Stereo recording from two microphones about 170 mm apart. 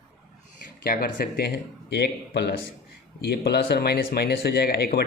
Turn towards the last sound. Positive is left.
turn(degrees=65)  # may be behind; listen again after turning